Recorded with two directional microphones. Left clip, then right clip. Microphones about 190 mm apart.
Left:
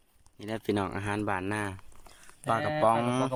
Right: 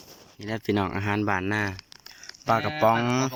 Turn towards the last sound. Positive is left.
turn(degrees=5)  # may be behind; listen again after turning